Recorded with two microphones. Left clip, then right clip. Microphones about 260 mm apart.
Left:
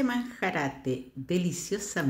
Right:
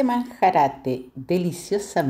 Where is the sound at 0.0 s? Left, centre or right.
Centre.